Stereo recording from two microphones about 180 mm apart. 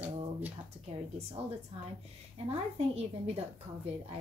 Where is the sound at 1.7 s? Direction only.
40° right (ahead or behind).